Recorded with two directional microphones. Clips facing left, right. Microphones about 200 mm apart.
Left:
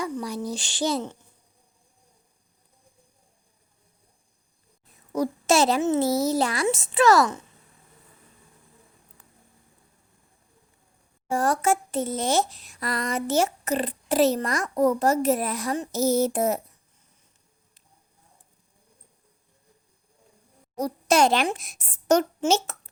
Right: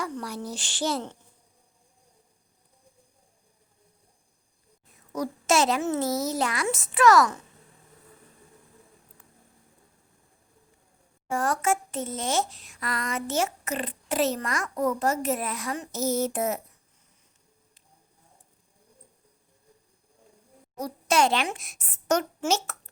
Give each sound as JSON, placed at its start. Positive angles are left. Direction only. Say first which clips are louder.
{"t": 0.0, "sound": "a child's voice", "louder": "left 4 dB", "side_deg": 15}
{"t": 5.1, "sound": "a child's voice", "louder": "left 3 dB", "side_deg": 30}
{"t": 11.3, "sound": "speech", "louder": "left 3 dB", "side_deg": 35}
{"t": 20.7, "sound": "a child's voice", "louder": "left 3 dB", "side_deg": 40}